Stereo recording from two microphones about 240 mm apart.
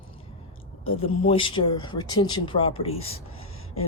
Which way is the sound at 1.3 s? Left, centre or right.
Left.